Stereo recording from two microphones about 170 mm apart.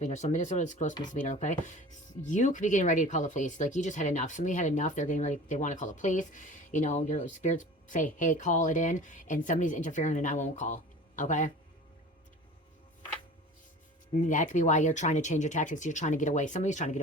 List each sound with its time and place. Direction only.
0.0 s speech: 45° left (ahead or behind)
14.2 s speech: 50° left (ahead or behind)